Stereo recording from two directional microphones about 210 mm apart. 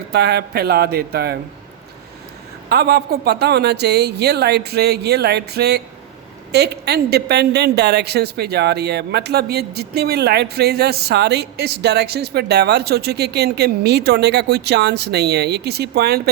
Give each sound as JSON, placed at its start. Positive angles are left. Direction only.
{"t": 0.1, "sound": "a woman's voice", "side_deg": -50}
{"t": 2.6, "sound": "a woman's voice", "side_deg": -50}